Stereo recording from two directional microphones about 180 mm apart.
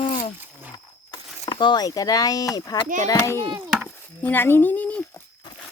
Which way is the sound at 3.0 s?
15° left (ahead or behind).